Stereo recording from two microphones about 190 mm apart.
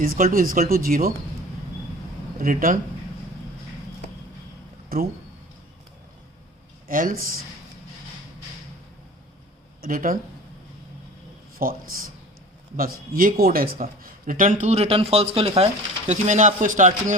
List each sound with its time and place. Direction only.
0.2 s speech: 45° right (ahead or behind)
2.4 s speech: 45° right (ahead or behind)
4.9 s speech: 50° right (ahead or behind)
6.8 s speech: 50° right (ahead or behind)
9.8 s speech: 45° right (ahead or behind)
11.5 s speech: 50° right (ahead or behind)